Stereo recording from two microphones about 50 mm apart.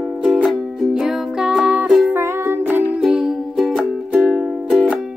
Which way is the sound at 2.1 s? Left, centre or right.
Right.